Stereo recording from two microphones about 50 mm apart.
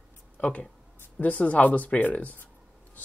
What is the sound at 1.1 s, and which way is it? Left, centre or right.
Speech, left.